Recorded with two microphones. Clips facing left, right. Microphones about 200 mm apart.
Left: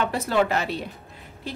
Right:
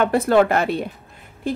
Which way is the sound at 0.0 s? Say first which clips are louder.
Right 7 dB; 55° right (ahead or behind).